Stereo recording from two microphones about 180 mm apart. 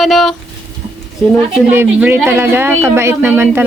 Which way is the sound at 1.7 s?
10° right (ahead or behind).